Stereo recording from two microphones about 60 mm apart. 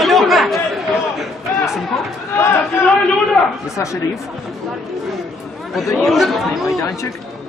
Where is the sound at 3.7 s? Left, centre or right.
Left.